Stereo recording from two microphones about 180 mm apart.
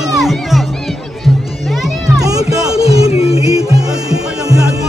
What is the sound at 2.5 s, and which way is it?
Music, 5° right (ahead or behind).